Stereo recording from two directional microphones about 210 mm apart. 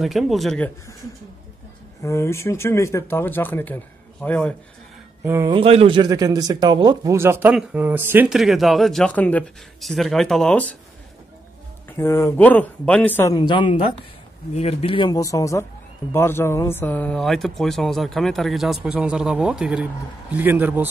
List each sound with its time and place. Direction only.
0.0 s speech: centre (ahead or behind)
2.0 s speech: 15° left (ahead or behind)
5.2 s speech: 15° right (ahead or behind)
5.6 s speech: 25° right (ahead or behind); by 10.8 s 5° left (ahead or behind)
12.0 s speech: 10° left (ahead or behind); by 20.9 s 10° right (ahead or behind)